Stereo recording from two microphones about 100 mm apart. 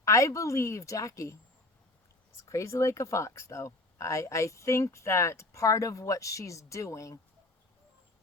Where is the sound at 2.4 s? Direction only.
30° left (ahead or behind).